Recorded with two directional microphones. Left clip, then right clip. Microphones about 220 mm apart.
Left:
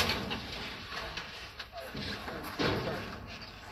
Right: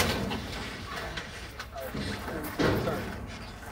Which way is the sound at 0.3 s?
5° left (ahead or behind).